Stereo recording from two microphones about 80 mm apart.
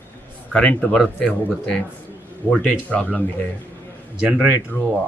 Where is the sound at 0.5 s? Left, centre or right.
Centre.